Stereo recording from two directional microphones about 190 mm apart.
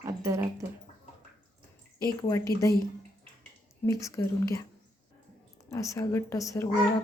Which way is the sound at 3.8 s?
15° left (ahead or behind).